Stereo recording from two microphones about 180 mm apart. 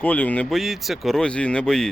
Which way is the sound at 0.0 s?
10° left (ahead or behind).